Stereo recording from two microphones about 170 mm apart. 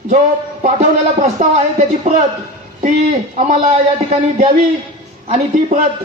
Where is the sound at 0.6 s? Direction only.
45° right (ahead or behind).